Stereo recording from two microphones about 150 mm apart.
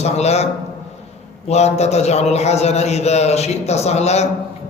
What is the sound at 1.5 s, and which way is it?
A man's voice, 45° left (ahead or behind).